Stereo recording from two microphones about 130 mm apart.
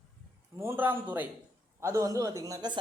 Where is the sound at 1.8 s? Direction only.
25° right (ahead or behind).